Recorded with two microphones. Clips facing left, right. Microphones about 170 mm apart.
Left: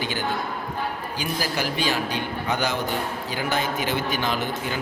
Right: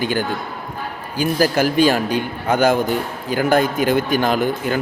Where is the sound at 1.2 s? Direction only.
45° right (ahead or behind).